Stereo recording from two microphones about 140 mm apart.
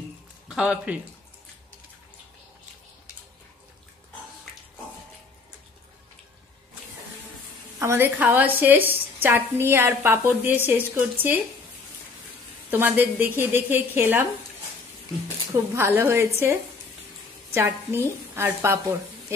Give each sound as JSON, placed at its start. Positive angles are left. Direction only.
{"t": 0.5, "sound": "speech", "side_deg": -5}
{"t": 7.8, "sound": "a woman's voice", "side_deg": -15}
{"t": 12.7, "sound": "a woman's voice", "side_deg": -15}
{"t": 15.5, "sound": "a woman's voice", "side_deg": -20}
{"t": 17.6, "sound": "a woman's voice", "side_deg": -15}